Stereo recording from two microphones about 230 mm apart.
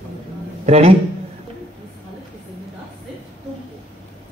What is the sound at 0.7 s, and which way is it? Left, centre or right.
Speech, right.